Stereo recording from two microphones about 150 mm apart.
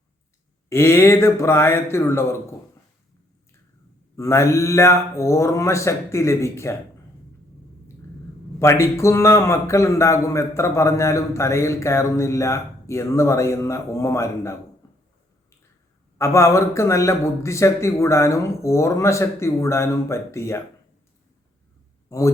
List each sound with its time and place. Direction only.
0.7 s speech: 15° left (ahead or behind)
4.2 s speech: 20° left (ahead or behind)
8.5 s speech: 20° left (ahead or behind)
16.1 s speech: 20° left (ahead or behind)
22.1 s speech: 20° left (ahead or behind)